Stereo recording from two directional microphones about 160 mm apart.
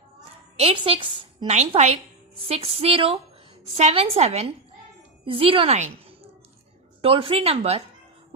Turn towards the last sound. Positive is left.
turn(degrees=-40)  # may be behind; listen again after turning